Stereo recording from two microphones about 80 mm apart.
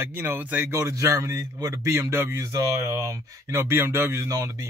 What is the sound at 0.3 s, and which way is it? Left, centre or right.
Speech, right.